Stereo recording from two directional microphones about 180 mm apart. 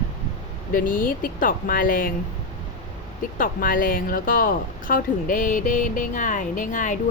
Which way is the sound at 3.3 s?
50° left (ahead or behind).